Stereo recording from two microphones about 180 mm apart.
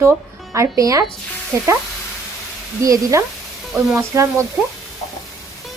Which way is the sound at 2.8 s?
15° right (ahead or behind).